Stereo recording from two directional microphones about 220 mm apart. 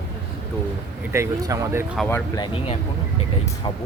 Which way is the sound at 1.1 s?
15° right (ahead or behind).